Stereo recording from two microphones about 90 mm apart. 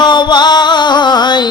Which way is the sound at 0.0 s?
55° left (ahead or behind).